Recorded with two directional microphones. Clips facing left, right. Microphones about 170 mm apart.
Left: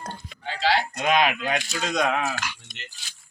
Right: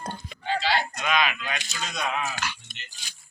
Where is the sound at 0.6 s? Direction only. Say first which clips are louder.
Left 7 dB; 60° left (ahead or behind).